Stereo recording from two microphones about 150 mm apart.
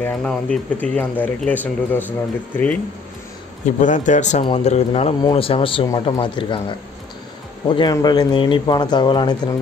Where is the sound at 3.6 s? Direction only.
55° left (ahead or behind); by 6.6 s 35° left (ahead or behind).